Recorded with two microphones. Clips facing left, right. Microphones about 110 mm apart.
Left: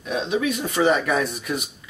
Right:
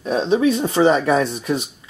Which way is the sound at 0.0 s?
35° right (ahead or behind).